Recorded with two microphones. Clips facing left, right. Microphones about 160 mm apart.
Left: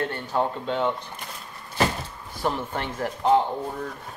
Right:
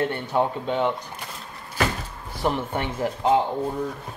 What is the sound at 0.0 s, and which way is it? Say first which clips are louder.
Speech: right 3 dB; 15° right (ahead or behind).